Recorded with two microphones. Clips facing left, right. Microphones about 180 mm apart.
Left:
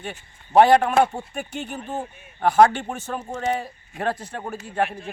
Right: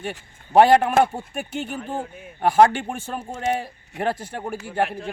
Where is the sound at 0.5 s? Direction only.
25° right (ahead or behind).